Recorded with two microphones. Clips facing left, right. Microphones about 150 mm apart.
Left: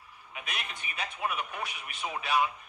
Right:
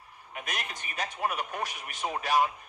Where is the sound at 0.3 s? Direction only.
40° right (ahead or behind).